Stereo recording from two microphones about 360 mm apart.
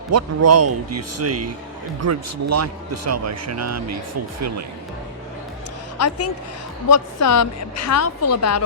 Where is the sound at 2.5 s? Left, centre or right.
Right.